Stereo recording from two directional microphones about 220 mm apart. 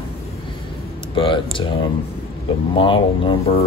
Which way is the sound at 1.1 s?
25° left (ahead or behind).